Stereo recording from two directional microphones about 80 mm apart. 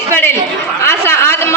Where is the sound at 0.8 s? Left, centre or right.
Left.